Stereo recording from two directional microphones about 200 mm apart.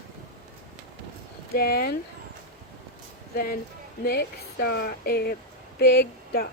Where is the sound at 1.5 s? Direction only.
50° left (ahead or behind).